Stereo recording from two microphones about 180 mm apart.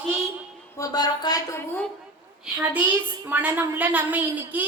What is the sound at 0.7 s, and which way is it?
Speech, 20° left (ahead or behind).